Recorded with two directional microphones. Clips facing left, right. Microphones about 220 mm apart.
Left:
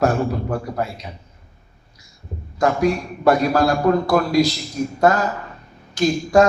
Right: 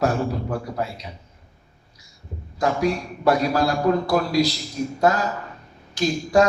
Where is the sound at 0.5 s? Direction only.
50° left (ahead or behind).